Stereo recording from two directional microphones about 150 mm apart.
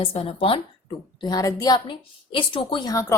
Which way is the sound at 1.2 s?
25° left (ahead or behind).